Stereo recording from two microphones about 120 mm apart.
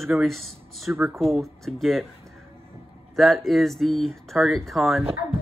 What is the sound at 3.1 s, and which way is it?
A man's voice, centre (ahead or behind).